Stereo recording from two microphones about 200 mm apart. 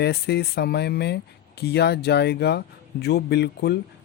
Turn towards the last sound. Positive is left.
turn(degrees=55)  # may be behind; listen again after turning